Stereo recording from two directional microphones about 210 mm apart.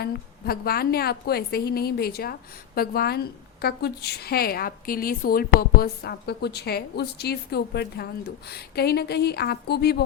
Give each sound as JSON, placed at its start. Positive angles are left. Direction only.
{"t": 0.0, "sound": "a woman's voice", "side_deg": 45}